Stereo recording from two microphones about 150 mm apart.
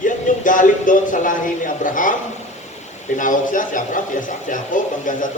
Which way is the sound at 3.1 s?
60° left (ahead or behind).